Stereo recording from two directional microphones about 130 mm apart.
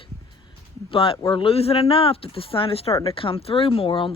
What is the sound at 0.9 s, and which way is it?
Speech, 45° left (ahead or behind).